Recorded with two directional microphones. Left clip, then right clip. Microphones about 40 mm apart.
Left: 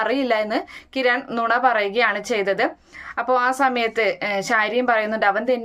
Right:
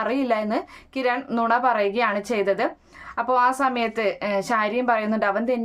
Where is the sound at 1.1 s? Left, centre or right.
Right.